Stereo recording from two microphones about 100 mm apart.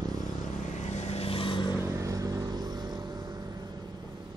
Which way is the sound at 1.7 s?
30° right (ahead or behind).